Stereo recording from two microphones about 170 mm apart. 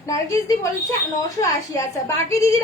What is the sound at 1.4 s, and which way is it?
Speech, 25° left (ahead or behind).